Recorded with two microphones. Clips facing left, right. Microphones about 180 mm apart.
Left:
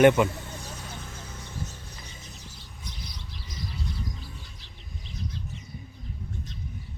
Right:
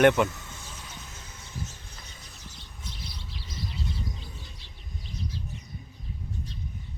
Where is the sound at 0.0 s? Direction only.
5° left (ahead or behind).